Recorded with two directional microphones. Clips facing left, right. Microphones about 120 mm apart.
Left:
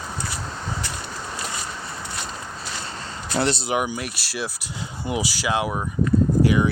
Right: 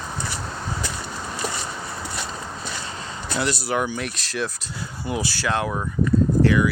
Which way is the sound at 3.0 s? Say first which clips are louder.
Left 3 dB; 35° left (ahead or behind).